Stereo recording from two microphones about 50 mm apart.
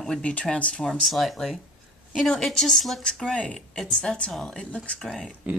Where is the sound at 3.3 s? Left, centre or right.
Centre.